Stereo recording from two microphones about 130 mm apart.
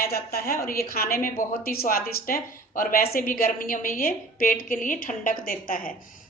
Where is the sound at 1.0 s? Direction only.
90° left.